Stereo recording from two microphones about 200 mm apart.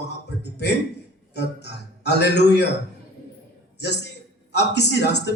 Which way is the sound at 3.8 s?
60° left (ahead or behind).